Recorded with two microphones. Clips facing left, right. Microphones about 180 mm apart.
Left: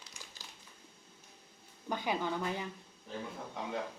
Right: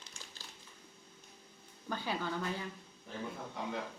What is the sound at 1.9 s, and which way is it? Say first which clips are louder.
Speech: left 3 dB; 15° left (ahead or behind).